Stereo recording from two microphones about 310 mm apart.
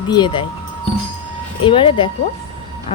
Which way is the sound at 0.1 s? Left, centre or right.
Centre.